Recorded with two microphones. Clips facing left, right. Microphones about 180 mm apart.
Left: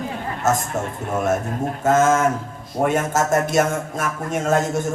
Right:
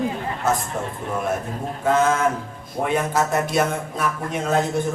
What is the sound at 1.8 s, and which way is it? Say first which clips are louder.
A man's voice: left 2 dB; 45° left (ahead or behind).